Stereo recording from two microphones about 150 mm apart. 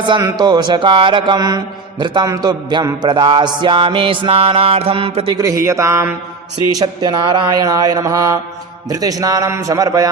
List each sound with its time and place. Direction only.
0.0 s a man's voice: 30° right (ahead or behind)
5.4 s mantra: 20° right (ahead or behind)